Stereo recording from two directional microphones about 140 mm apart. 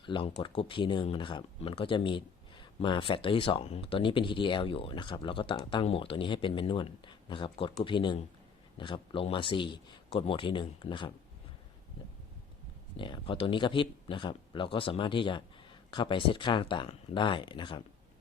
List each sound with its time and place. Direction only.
0.0 s speech: 35° left (ahead or behind)
13.0 s speech: 40° left (ahead or behind)